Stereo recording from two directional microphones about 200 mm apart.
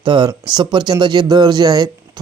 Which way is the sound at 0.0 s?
20° right (ahead or behind).